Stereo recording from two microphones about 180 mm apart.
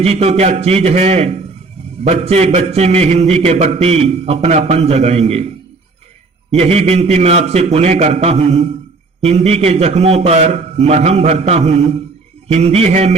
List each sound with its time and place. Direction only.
0.0 s a man's voice: 35° right (ahead or behind)
6.5 s a man's voice: 35° right (ahead or behind)